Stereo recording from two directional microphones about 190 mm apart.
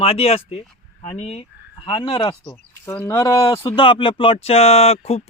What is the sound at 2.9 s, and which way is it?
Speech, 10° left (ahead or behind).